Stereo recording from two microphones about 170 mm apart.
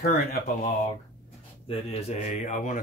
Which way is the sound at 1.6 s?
35° left (ahead or behind).